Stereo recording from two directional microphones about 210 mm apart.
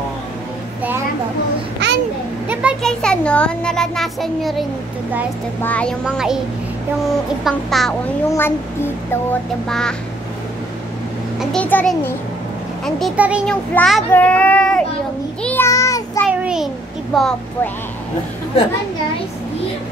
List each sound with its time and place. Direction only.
1.8 s babbling: 55° right (ahead or behind)
2.5 s a child's voice: centre (ahead or behind)
7.4 s a child's voice: centre (ahead or behind)
11.3 s a child's voice: 5° left (ahead or behind)
15.4 s child singing: 10° left (ahead or behind)
16.3 s a sound: 5° right (ahead or behind)
17.1 s a child's voice: centre (ahead or behind)